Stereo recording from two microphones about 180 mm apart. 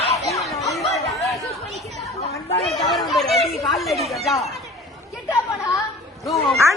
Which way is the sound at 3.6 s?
Centre (ahead or behind).